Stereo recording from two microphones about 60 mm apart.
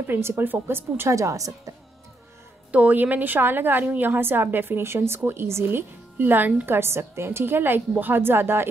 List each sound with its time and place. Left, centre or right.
0.0 s a woman's voice: right
1.1 s a woman's voice: right
2.7 s a woman's voice: right